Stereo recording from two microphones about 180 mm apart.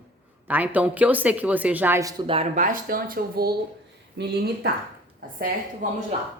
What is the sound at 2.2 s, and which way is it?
Speech, 35° right (ahead or behind).